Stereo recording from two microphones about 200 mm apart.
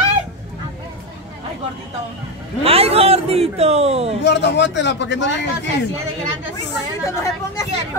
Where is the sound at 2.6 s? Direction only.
30° right (ahead or behind).